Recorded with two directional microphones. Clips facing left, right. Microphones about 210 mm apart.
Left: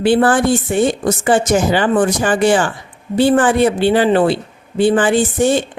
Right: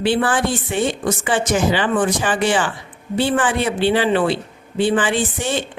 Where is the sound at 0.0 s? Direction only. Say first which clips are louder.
Left 6 dB; 45° left (ahead or behind).